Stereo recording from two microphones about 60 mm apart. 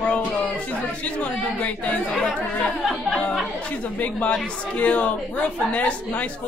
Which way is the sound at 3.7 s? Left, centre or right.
Left.